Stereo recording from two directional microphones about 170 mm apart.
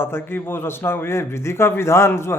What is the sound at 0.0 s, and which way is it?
A man's voice, 15° left (ahead or behind).